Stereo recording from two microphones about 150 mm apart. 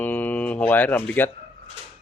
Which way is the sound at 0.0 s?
10° left (ahead or behind).